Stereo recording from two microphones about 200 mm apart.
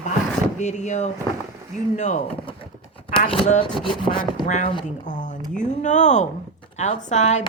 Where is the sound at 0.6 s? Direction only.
35° left (ahead or behind).